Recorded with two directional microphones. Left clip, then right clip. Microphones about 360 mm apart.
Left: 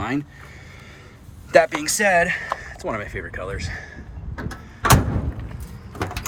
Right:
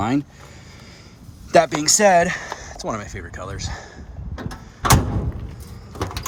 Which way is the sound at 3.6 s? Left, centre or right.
Right.